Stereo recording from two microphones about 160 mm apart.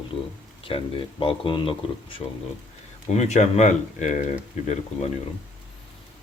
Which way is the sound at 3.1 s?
45° left (ahead or behind).